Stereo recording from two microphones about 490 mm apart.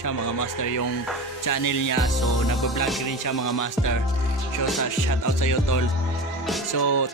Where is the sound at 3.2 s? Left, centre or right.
Left.